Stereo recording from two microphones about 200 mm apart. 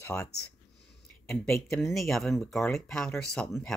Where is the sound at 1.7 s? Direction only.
Centre (ahead or behind).